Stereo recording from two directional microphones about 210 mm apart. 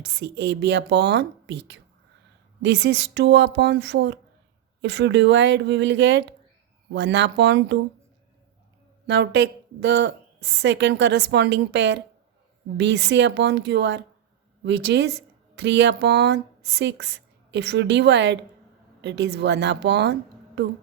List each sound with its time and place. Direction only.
0.0 s speech: 55° right (ahead or behind)
9.0 s a woman's voice: 50° right (ahead or behind)